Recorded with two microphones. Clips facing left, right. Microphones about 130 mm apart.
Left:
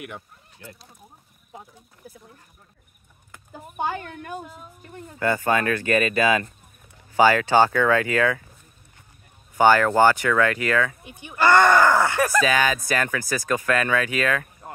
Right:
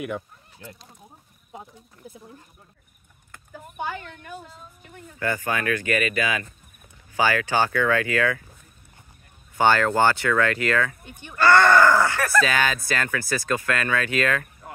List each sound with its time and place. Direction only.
3.7 s speech: 35° left (ahead or behind)
5.2 s speech: 25° left (ahead or behind)
7.2 s speech: 25° left (ahead or behind)
9.6 s speech: 10° left (ahead or behind)